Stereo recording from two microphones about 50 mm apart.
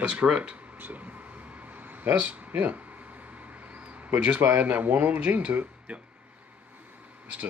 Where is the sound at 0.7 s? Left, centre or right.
Right.